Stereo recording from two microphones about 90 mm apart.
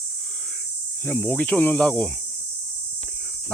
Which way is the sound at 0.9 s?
20° left (ahead or behind).